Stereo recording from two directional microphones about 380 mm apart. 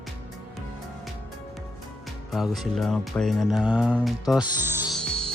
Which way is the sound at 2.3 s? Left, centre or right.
Centre.